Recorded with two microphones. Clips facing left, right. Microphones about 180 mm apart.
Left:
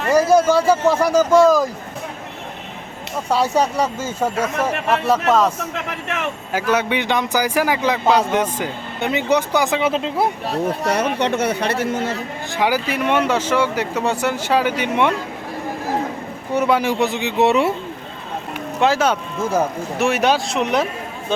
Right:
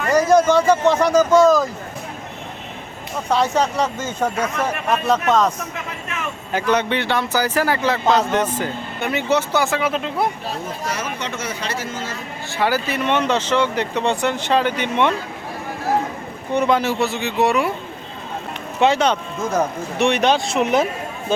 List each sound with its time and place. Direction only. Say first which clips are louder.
0.1 s a man's voice: even; 10° left (ahead or behind)
3.2 s a man's voice: left 1 dB; 10° left (ahead or behind)
5.7 s speech: left 4 dB; 70° left (ahead or behind)
6.5 s a man's voice: even; 5° left (ahead or behind); by 10.2 s 25° left (ahead or behind)
10.7 s speech: left 9 dB; 65° left (ahead or behind)
12.5 s a man's voice: left 1 dB; 15° left (ahead or behind)
16.5 s a man's voice: even; 10° left (ahead or behind)
18.8 s speech: right 1 dB; 5° left (ahead or behind)